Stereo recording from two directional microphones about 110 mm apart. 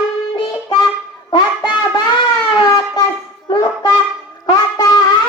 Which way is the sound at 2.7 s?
30° left (ahead or behind).